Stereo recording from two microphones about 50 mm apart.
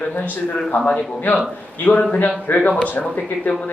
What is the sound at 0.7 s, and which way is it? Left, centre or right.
A man's voice, left.